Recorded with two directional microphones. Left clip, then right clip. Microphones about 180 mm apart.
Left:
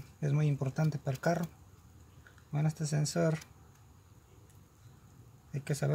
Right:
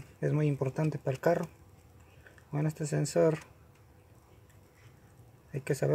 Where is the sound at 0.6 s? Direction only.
35° right (ahead or behind).